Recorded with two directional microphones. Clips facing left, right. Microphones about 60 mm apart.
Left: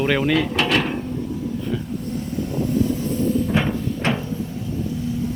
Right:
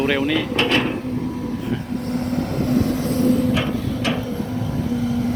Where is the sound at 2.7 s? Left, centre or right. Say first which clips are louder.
Right 2 dB; right.